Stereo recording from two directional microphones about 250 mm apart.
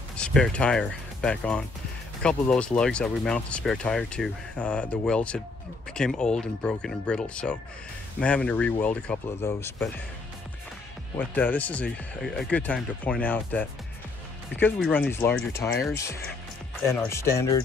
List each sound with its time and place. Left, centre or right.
0.2 s speech: centre
11.1 s speech: centre
16.8 s speech: centre